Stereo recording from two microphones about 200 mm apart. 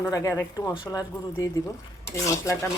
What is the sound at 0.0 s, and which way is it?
Speech, 15° left (ahead or behind).